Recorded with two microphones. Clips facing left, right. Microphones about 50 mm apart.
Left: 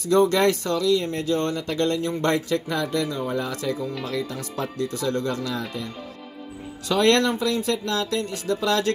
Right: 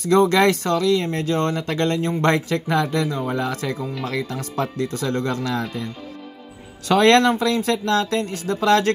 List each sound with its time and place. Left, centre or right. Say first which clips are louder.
0.0 s speech: right 3 dB; right
3.3 s speech: right 2 dB; right
6.9 s speech: right 5 dB; right
8.5 s speech: right 6 dB; right